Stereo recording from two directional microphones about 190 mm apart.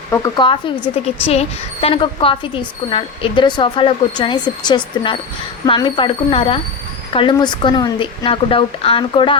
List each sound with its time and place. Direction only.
0.1 s a woman's voice: 20° left (ahead or behind)